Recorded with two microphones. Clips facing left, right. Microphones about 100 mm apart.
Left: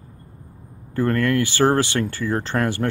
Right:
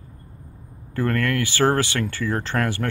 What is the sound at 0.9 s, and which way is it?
Speech, 25° left (ahead or behind).